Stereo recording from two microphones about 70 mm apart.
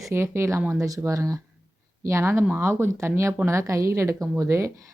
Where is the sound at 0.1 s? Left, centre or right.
Right.